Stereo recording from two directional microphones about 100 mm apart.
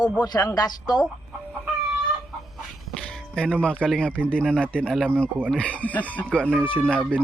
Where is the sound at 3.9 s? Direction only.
10° left (ahead or behind).